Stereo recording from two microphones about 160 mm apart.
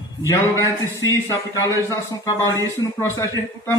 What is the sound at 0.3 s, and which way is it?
A man's voice, 15° left (ahead or behind).